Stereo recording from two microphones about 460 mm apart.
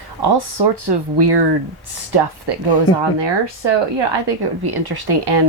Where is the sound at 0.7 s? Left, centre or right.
Right.